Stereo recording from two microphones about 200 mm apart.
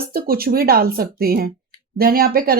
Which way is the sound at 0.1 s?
50° right (ahead or behind).